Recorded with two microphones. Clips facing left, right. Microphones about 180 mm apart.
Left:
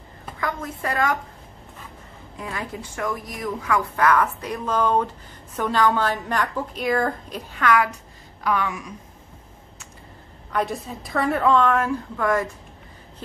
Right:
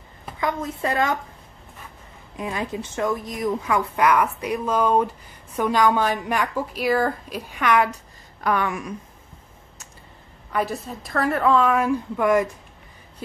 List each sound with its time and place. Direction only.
0.4 s a woman's voice: 20° right (ahead or behind)
2.3 s a woman's voice: 20° right (ahead or behind)
8.5 s a woman's voice: 55° right (ahead or behind)
10.5 s a woman's voice: centre (ahead or behind)